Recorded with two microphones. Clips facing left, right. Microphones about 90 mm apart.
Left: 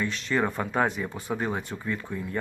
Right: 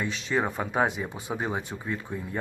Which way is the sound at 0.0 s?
15° right (ahead or behind).